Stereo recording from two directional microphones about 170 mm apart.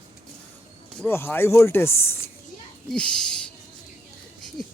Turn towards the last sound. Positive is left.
turn(degrees=5)  # may be behind; listen again after turning